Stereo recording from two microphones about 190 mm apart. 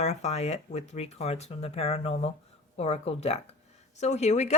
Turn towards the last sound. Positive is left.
turn(degrees=35)  # may be behind; listen again after turning